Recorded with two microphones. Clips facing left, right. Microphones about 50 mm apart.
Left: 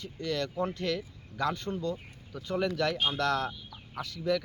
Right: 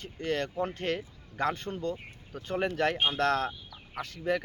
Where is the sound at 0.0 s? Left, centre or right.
Right.